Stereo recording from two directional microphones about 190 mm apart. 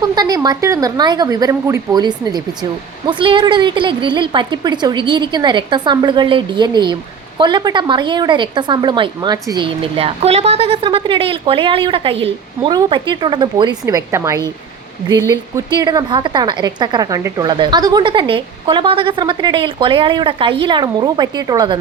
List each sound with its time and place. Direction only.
0.0 s a woman's voice: 20° right (ahead or behind)